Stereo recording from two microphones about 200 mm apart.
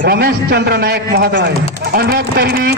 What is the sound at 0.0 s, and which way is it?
Speech, 55° right (ahead or behind).